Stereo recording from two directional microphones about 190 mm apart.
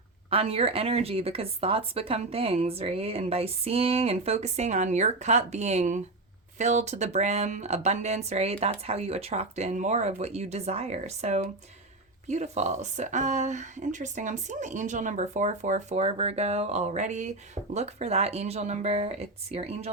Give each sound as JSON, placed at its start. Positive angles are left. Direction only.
{"t": 0.3, "sound": "speech", "side_deg": -30}